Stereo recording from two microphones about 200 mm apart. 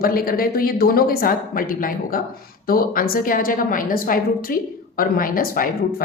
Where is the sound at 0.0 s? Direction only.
45° left (ahead or behind).